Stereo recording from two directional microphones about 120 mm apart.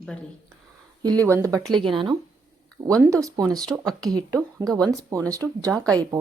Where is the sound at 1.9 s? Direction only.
40° right (ahead or behind).